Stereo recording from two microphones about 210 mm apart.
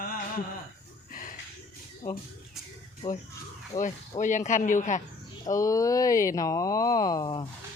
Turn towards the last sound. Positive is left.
turn(degrees=20)  # may be behind; listen again after turning